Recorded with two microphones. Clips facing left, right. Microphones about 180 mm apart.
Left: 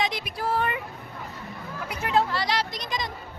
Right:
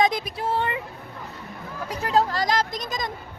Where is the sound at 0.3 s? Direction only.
25° right (ahead or behind).